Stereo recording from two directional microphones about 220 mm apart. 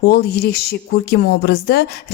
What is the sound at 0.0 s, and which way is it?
A woman's voice, 45° left (ahead or behind).